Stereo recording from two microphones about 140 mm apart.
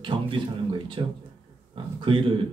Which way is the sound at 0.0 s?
35° right (ahead or behind).